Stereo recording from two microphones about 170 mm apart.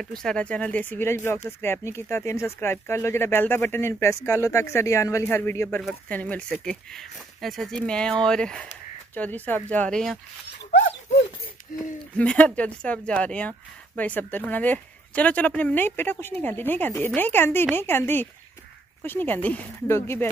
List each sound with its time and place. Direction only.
0.2 s speech: 5° left (ahead or behind)
12.2 s speech: 5° left (ahead or behind)